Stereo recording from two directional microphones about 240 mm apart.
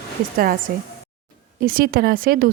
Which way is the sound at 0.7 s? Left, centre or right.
Right.